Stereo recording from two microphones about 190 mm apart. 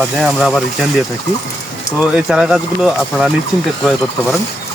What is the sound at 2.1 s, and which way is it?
Speech, 5° right (ahead or behind).